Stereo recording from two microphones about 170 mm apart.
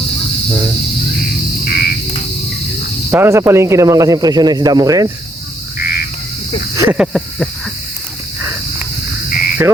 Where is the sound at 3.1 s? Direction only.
15° right (ahead or behind).